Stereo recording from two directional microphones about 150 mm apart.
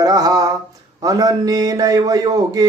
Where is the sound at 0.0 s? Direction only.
25° right (ahead or behind).